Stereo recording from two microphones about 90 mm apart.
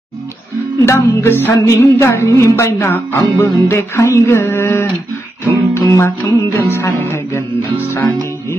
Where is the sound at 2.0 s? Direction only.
30° left (ahead or behind).